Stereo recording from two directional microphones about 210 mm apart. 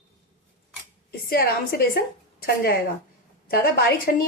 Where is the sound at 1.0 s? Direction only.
50° left (ahead or behind).